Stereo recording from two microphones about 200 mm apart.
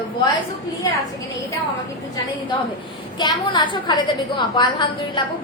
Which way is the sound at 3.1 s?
20° left (ahead or behind).